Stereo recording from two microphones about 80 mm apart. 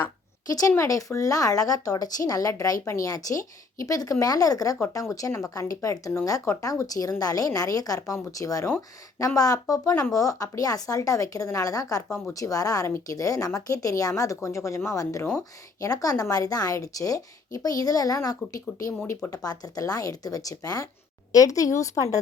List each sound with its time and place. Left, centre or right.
0.4 s a woman's voice: left
12.0 s speech: centre
12.3 s speech: left